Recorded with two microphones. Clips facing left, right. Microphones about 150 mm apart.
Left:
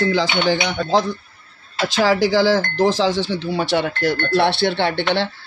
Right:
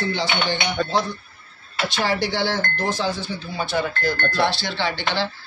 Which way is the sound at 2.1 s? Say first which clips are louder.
Left 7 dB; 90° left.